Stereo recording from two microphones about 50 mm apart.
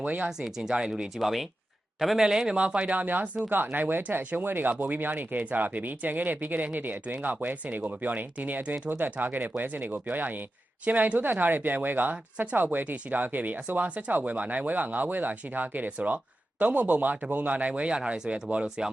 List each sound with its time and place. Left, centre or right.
0.0 s speech: right
0.3 s speech: centre
1.2 s speech: centre
2.2 s speech: centre